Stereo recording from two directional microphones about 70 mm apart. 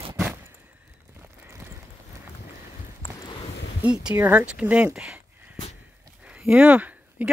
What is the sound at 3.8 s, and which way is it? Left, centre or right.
Speech, centre.